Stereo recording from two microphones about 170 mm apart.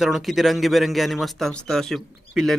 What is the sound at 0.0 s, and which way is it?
A man's voice, centre (ahead or behind).